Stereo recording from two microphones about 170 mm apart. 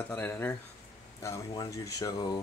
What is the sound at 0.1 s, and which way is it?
Speech, 15° left (ahead or behind).